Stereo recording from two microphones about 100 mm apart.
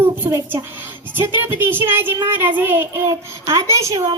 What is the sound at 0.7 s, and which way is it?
A child's voice, 20° right (ahead or behind).